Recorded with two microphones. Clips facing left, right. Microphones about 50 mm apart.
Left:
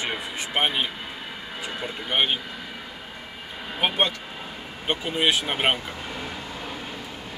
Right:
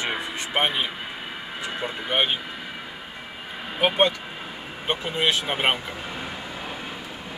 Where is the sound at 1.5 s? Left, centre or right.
Centre.